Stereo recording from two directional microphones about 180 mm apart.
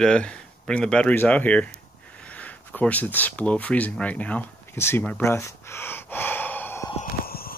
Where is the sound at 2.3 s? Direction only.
10° left (ahead or behind).